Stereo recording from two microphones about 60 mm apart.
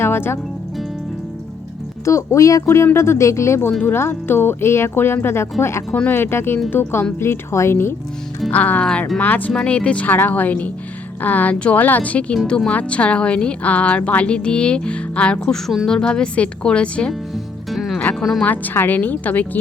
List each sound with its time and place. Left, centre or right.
0.0 s music: left
2.0 s speech: left
2.6 s speech: left
3.9 s speech: left
7.2 s speech: left
8.4 s speech: left
15.5 s a woman's voice: centre
17.3 s music: centre
18.2 s a woman's voice: centre
18.4 s speech: left